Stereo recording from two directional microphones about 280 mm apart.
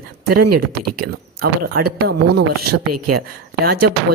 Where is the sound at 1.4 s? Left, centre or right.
Right.